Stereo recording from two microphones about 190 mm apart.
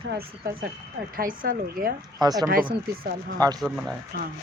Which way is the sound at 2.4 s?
50° right (ahead or behind).